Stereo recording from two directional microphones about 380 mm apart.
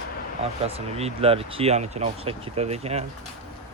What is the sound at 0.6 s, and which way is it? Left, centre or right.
Speech, centre.